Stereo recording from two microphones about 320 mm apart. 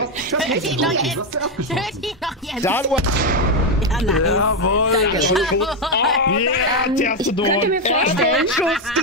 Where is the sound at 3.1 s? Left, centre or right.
Right.